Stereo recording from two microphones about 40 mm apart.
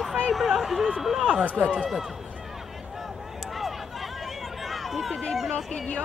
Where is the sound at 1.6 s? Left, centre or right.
Centre.